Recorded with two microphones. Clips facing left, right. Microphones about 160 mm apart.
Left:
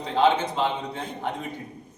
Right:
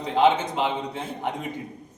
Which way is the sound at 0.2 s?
15° right (ahead or behind).